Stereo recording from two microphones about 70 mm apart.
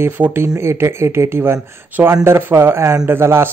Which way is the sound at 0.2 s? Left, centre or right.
Right.